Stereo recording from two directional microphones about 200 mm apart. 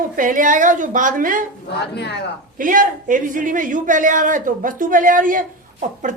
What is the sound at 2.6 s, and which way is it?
A man's voice, 40° right (ahead or behind).